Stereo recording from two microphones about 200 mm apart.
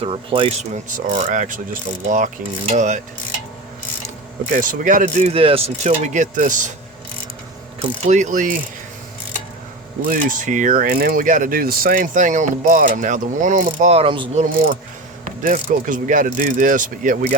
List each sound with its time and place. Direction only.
0.0 s speech: 25° right (ahead or behind)
0.9 s speech: 40° right (ahead or behind)
4.5 s speech: 40° right (ahead or behind)
7.8 s speech: 35° right (ahead or behind)
10.1 s speech: 40° right (ahead or behind)
15.2 s speech: 40° right (ahead or behind)